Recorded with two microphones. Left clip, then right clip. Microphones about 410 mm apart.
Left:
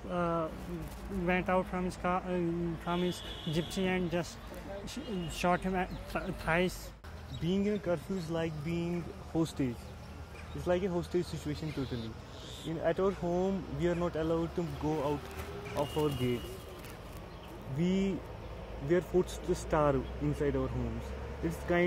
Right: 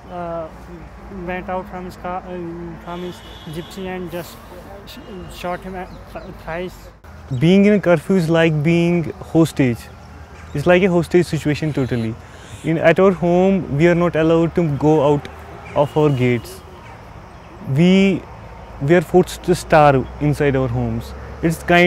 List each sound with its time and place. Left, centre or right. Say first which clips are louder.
0.1 s a sound: right 6 dB; left
1.2 s speech: right 6 dB; left
7.4 s speech: right 19 dB; right
10.6 s speech: right 18 dB; right
17.7 s speech: right 18 dB; right